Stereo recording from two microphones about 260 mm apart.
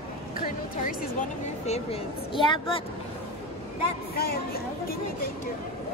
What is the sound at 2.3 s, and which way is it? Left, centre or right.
Speech, centre.